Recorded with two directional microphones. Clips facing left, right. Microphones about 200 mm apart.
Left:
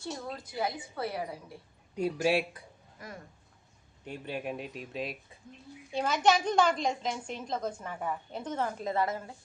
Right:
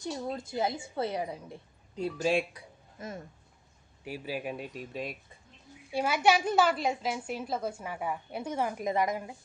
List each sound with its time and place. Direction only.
0.0 s a woman's voice: 20° right (ahead or behind)
2.0 s speech: 10° left (ahead or behind)
3.0 s a woman's voice: 25° right (ahead or behind)
4.0 s speech: 5° right (ahead or behind)
5.9 s a woman's voice: 10° right (ahead or behind)